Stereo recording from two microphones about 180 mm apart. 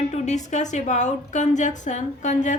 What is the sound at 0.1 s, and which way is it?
Speech, 40° left (ahead or behind).